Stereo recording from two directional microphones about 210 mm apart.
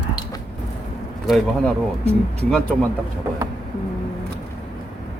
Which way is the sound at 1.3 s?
Centre (ahead or behind).